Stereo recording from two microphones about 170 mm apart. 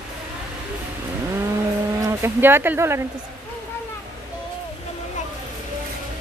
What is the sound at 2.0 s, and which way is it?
Speech, 15° right (ahead or behind).